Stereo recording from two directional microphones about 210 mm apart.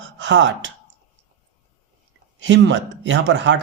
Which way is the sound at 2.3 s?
60° right (ahead or behind).